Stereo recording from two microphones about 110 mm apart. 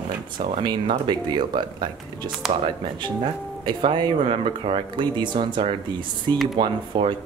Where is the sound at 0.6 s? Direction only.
45° right (ahead or behind).